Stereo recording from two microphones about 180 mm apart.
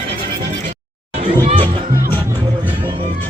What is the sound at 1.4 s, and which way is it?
Music, 30° right (ahead or behind).